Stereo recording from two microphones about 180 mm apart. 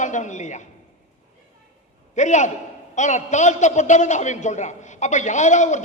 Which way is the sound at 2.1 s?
40° left (ahead or behind).